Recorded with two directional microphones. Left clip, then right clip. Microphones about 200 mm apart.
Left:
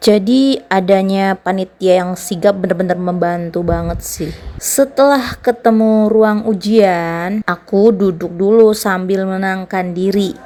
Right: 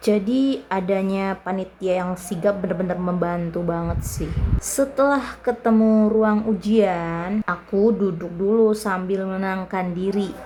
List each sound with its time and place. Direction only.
0.0 s a woman's voice: 30° left (ahead or behind)